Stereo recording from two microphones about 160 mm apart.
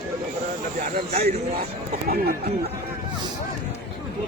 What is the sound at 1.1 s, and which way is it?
Speech, 75° right (ahead or behind).